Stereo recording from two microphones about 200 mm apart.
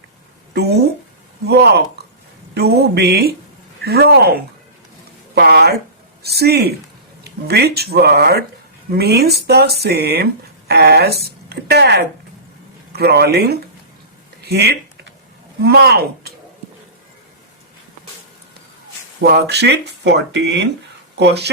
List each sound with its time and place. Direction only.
0.5 s speech: 55° right (ahead or behind)
14.4 s a sound: 55° right (ahead or behind)
15.6 s speech: 55° right (ahead or behind)
19.2 s speech: 55° right (ahead or behind)